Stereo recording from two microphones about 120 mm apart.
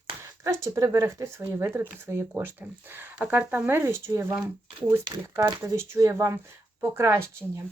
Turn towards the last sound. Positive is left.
turn(degrees=-25)  # may be behind; listen again after turning